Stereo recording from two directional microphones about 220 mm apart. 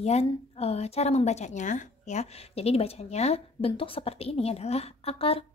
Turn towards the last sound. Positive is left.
turn(degrees=25)  # may be behind; listen again after turning